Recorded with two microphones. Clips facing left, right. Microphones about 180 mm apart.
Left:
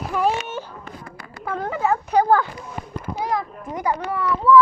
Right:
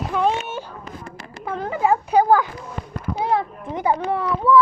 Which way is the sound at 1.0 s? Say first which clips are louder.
Left 1 dB; 25° right (ahead or behind).